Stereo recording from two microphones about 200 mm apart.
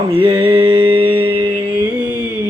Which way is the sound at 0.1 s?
25° right (ahead or behind).